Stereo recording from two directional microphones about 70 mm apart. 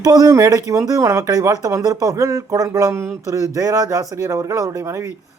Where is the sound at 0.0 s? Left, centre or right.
Right.